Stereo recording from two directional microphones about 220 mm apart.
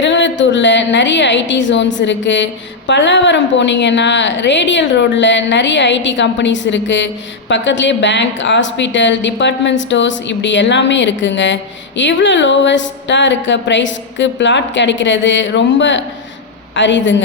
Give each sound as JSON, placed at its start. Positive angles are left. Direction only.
{"t": 0.0, "sound": "a woman's voice", "side_deg": 55}